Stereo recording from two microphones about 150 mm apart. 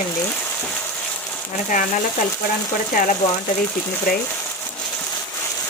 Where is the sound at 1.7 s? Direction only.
60° left (ahead or behind).